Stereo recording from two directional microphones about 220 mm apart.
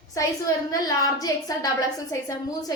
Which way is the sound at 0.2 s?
15° left (ahead or behind).